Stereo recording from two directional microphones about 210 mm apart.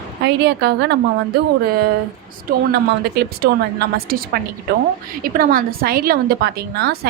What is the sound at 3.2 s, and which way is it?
A woman's voice, 50° right (ahead or behind).